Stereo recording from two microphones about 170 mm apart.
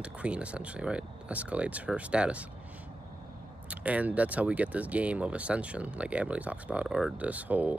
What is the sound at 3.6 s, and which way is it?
Speech, 10° right (ahead or behind).